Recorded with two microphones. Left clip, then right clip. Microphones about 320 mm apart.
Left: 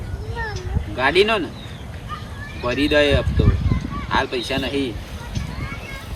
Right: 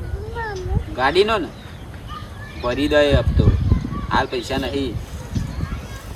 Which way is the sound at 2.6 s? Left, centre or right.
Centre.